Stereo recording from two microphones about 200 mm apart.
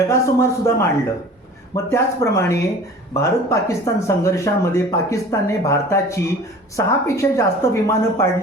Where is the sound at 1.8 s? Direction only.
15° left (ahead or behind).